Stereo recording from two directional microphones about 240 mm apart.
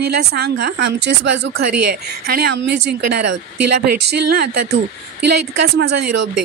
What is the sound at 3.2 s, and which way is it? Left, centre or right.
Speech, right.